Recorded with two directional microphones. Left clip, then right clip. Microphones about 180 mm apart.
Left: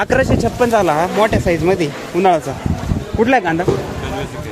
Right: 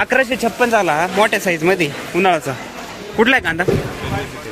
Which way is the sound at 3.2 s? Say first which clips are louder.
Even; 10° right (ahead or behind).